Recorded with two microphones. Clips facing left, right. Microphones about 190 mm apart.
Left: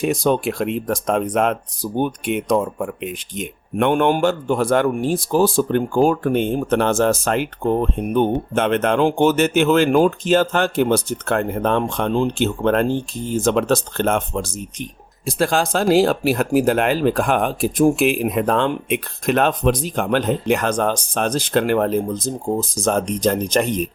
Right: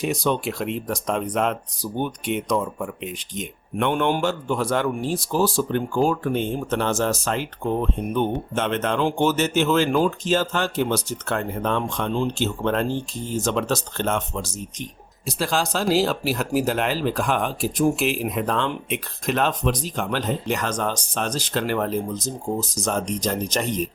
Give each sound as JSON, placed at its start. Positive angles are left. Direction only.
{"t": 0.0, "sound": "speech", "side_deg": 50}